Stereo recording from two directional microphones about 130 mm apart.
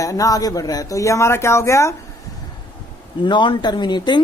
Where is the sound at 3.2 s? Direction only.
40° left (ahead or behind).